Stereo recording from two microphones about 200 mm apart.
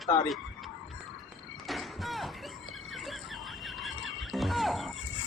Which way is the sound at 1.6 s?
Centre (ahead or behind).